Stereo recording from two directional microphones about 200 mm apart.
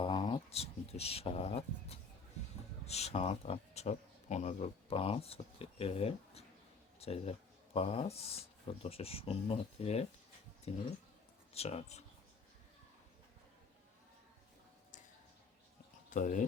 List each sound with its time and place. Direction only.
0.0 s speech: 25° left (ahead or behind)
16.0 s speech: 40° left (ahead or behind)